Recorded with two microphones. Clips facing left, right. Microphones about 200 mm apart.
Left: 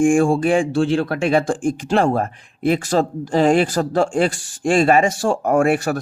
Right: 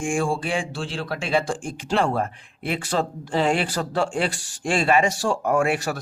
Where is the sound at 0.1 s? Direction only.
55° left (ahead or behind).